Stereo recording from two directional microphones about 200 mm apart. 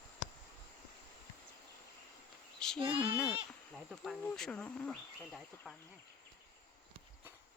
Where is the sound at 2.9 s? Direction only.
15° left (ahead or behind).